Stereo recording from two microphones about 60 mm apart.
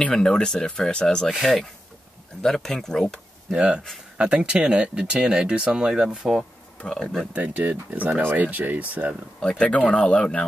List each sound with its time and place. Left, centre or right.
0.1 s speech: centre
3.5 s speech: centre
7.3 s speech: right
9.4 s speech: centre